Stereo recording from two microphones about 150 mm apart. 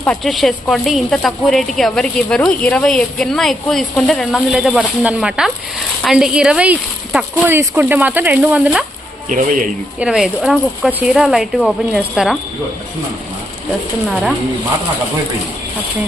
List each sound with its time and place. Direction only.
0.0 s a woman's voice: 5° left (ahead or behind)
9.3 s speech: 60° right (ahead or behind)
10.0 s a woman's voice: 5° right (ahead or behind)
14.1 s a woman's voice: 5° right (ahead or behind)